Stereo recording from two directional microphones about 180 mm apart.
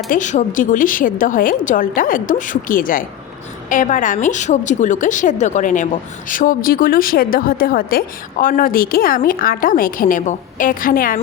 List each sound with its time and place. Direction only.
0.1 s a woman's voice: 45° left (ahead or behind)